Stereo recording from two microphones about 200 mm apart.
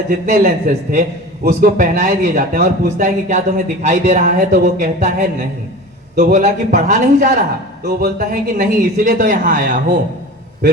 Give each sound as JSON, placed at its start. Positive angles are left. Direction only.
{"t": 0.1, "sound": "speech", "side_deg": -45}